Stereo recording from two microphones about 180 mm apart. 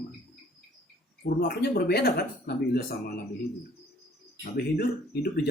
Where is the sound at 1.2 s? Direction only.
60° left (ahead or behind).